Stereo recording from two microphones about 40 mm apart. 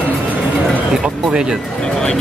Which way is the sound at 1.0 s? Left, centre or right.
Centre.